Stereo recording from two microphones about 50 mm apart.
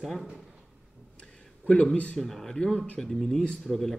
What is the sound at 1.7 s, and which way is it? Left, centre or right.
Speech, left.